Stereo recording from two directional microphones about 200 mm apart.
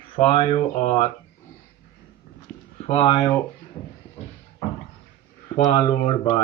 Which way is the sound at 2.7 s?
30° left (ahead or behind).